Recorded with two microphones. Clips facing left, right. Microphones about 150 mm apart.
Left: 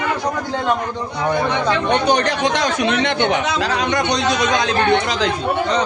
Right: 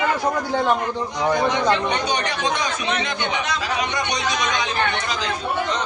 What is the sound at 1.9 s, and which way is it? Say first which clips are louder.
Speech: left 7 dB; 70° left (ahead or behind).